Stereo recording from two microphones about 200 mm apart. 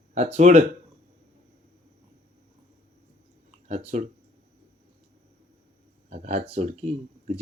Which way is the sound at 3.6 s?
35° right (ahead or behind).